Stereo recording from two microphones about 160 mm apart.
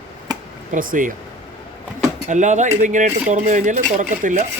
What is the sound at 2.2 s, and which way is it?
Speech, 50° right (ahead or behind).